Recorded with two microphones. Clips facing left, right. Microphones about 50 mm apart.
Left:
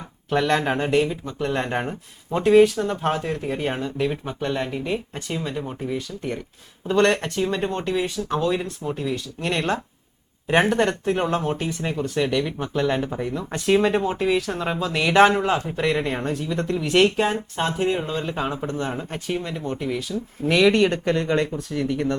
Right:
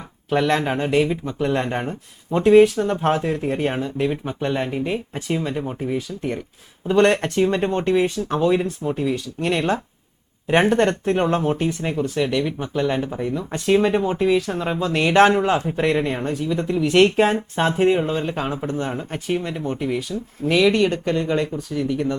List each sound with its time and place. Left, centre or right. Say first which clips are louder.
0.3 s speech: right 1 dB; centre
1.5 s speech: right 2 dB; centre
2.4 s speech: right 2 dB; centre
17.0 s speech: right 4 dB; centre